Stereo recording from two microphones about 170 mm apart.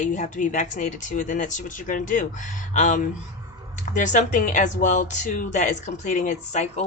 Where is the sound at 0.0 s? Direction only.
45° left (ahead or behind).